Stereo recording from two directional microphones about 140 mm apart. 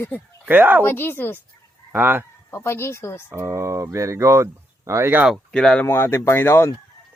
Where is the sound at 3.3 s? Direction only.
20° right (ahead or behind).